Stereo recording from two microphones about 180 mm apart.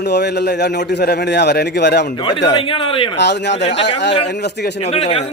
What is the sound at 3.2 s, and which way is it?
Speech, 70° left (ahead or behind).